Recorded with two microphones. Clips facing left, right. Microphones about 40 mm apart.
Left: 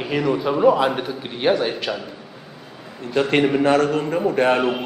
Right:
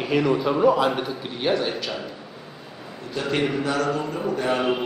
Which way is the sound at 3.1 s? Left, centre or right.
Left.